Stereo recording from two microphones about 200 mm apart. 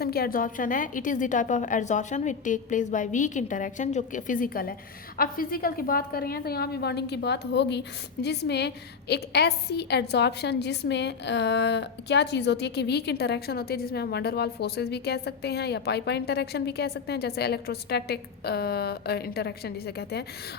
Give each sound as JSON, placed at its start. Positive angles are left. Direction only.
{"t": 0.0, "sound": "a woman's voice", "side_deg": 50}